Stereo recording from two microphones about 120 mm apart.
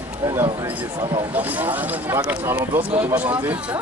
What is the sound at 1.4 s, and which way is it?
Speech, 15° right (ahead or behind).